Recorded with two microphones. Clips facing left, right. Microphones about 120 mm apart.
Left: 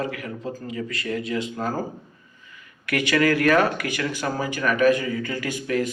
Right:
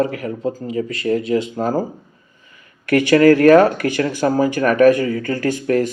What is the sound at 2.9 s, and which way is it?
Speech, 45° right (ahead or behind).